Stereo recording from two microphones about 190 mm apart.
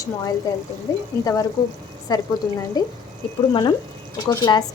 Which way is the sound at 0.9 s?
20° left (ahead or behind).